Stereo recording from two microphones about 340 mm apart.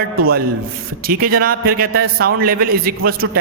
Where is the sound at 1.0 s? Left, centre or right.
Right.